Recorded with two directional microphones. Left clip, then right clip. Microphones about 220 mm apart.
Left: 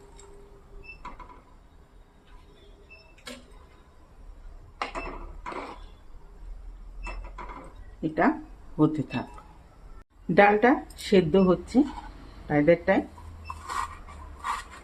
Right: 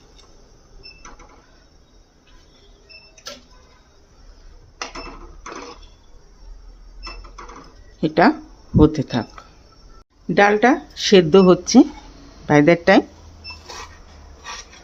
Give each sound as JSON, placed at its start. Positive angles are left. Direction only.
{"t": 8.0, "sound": "speech", "side_deg": -45}
{"t": 8.8, "sound": "speech", "side_deg": -35}
{"t": 10.3, "sound": "speech", "side_deg": -15}